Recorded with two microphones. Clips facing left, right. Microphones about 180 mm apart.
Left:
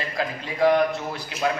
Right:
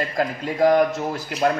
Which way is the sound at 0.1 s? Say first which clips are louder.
Right 5 dB; 45° right (ahead or behind).